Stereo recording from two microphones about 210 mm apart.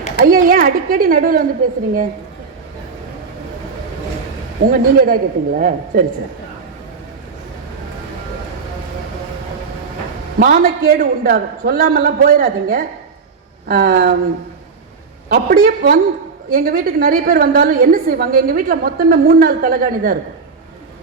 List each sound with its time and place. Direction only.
0.2 s a woman's voice: 40° right (ahead or behind)
4.6 s a woman's voice: 45° right (ahead or behind)
10.4 s a woman's voice: 45° right (ahead or behind)
15.3 s a man's voice: 40° right (ahead or behind)